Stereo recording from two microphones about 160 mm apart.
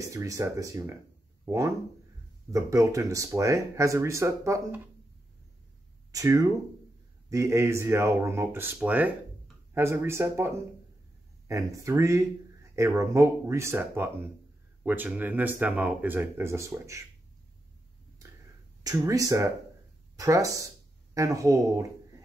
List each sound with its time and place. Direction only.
0.1 s speech: 20° right (ahead or behind)
6.1 s speech: 20° right (ahead or behind)
18.9 s speech: 20° right (ahead or behind)